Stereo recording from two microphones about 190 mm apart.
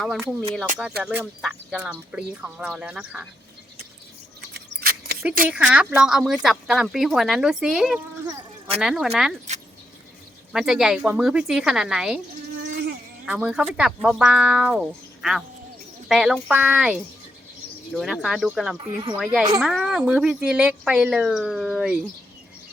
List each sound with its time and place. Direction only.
0.2 s speech: 5° right (ahead or behind)
4.4 s a sound: 55° right (ahead or behind)
5.5 s speech: 5° right (ahead or behind)
10.5 s speech: 5° right (ahead or behind)
13.2 s speech: 5° right (ahead or behind)